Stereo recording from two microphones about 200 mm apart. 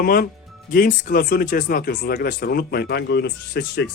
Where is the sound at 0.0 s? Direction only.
45° left (ahead or behind).